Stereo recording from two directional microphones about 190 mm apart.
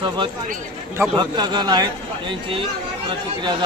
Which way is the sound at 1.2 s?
20° right (ahead or behind).